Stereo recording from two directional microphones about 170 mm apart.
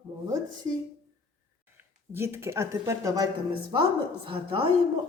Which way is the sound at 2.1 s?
15° right (ahead or behind).